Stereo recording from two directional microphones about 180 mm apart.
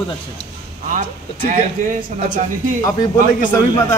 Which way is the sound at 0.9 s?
45° right (ahead or behind).